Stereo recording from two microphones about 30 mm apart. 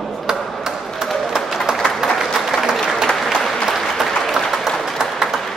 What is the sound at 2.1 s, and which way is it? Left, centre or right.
Applause, centre.